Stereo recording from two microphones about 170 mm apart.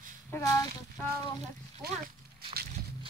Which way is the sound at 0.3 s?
20° left (ahead or behind).